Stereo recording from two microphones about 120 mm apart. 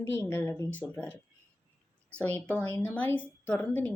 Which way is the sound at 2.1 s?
15° left (ahead or behind).